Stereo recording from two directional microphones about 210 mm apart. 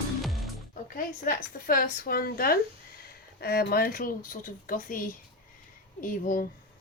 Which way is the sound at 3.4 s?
45° left (ahead or behind).